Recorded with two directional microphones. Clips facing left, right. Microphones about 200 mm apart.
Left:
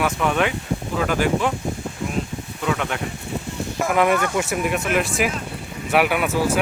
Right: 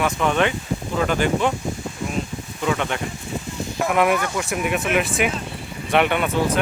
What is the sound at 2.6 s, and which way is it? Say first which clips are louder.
A man's voice: right 1 dB; centre (ahead or behind).